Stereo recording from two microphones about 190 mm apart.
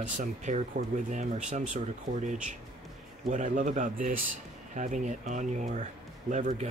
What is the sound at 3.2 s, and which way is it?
Speech, 40° right (ahead or behind).